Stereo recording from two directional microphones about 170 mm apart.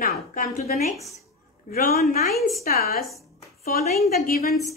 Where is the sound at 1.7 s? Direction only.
60° left (ahead or behind).